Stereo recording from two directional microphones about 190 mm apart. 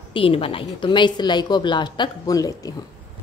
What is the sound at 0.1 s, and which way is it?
A woman's voice, 30° left (ahead or behind).